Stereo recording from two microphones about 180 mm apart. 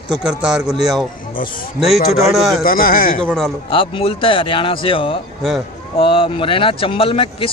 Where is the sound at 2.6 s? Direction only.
50° left (ahead or behind).